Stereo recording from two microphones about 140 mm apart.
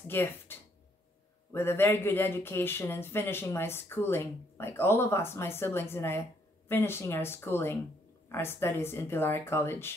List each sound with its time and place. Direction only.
0.0 s a man's voice: 15° left (ahead or behind)